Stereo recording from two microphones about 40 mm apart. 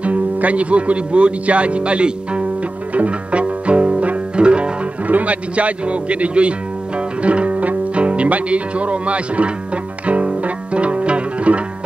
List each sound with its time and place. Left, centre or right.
0.0 s speech: right
2.9 s music: right
5.1 s speech: right
7.2 s music: right